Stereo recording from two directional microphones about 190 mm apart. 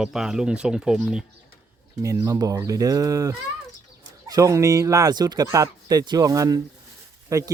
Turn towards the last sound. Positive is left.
turn(degrees=-15)  # may be behind; listen again after turning